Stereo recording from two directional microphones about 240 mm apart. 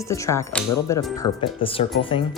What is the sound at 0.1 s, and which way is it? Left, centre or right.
Speech, centre.